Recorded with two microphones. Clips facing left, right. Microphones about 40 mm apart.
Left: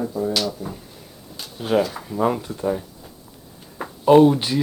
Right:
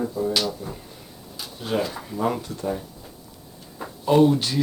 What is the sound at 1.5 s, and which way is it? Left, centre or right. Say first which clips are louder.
Speech: left 6 dB; centre.